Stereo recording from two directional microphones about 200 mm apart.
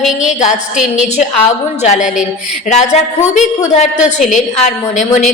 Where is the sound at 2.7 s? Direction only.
35° left (ahead or behind).